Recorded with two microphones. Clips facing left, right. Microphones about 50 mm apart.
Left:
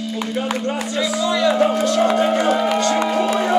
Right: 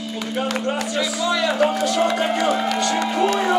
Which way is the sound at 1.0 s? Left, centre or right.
Centre.